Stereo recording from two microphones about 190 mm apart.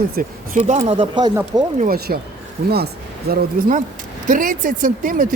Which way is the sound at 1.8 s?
50° right (ahead or behind).